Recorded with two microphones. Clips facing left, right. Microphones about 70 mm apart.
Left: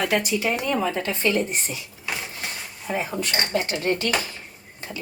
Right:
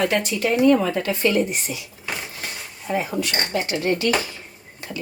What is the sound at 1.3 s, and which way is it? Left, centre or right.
Speech, left.